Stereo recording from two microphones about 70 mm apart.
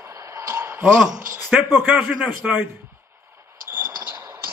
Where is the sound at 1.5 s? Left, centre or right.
Centre.